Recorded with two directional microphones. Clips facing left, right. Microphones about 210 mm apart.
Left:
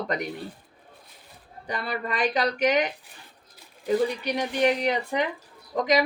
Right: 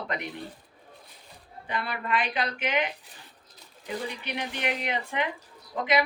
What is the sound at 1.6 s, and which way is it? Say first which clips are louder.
Speech: left 2 dB; 40° left (ahead or behind).